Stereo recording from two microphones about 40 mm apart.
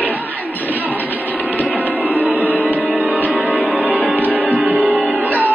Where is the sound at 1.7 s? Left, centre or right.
Right.